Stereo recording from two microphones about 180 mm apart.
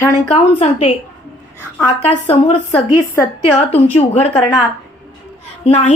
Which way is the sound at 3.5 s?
35° left (ahead or behind).